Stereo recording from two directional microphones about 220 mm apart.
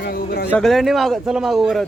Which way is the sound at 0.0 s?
45° left (ahead or behind).